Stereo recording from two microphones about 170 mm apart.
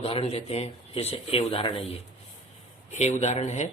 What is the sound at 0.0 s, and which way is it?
Speech, 35° left (ahead or behind).